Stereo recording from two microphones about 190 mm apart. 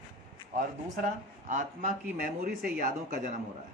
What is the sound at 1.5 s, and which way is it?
Speech, 40° right (ahead or behind).